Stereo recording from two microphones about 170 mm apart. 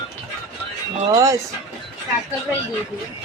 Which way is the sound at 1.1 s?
20° right (ahead or behind).